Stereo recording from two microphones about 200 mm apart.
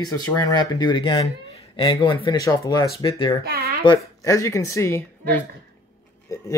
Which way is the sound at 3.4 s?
50° right (ahead or behind).